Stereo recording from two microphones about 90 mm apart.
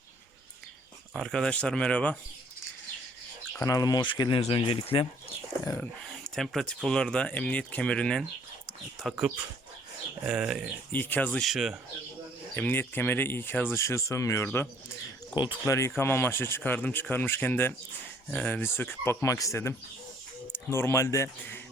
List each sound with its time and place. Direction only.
1.2 s speech: 10° left (ahead or behind)
3.6 s speech: 40° left (ahead or behind)
4.0 s speech: 65° left (ahead or behind)
6.2 s speech: 5° left (ahead or behind)
9.0 s speech: 5° right (ahead or behind)
10.9 s speech: 20° left (ahead or behind)
11.3 s speech: centre (ahead or behind)
12.5 s speech: 20° left (ahead or behind)
19.2 s speech: 40° left (ahead or behind)